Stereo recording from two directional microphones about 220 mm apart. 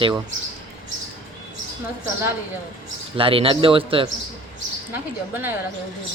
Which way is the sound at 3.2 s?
25° right (ahead or behind).